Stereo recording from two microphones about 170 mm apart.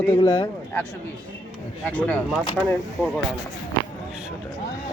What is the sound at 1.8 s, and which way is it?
Speech, 10° left (ahead or behind).